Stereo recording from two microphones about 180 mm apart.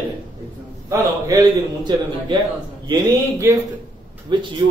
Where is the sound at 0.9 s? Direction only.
20° right (ahead or behind).